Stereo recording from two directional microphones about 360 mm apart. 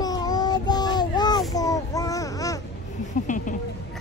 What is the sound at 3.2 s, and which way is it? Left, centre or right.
Speech, left.